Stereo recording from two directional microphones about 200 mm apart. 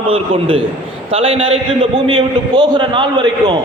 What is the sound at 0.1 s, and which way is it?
A man's voice, 25° right (ahead or behind).